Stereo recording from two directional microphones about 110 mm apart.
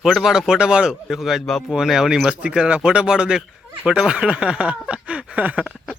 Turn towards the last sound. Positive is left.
turn(degrees=-10)  # may be behind; listen again after turning